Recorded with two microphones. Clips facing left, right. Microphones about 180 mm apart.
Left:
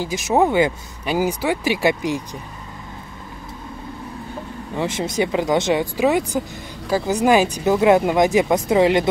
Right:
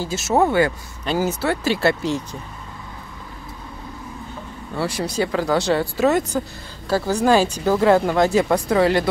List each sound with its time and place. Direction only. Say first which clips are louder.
0.0 s speech: left 1 dB; 15° left (ahead or behind)
4.7 s speech: left 1 dB; 20° left (ahead or behind)